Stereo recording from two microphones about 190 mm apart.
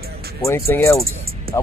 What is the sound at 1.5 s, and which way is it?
Music, 50° right (ahead or behind).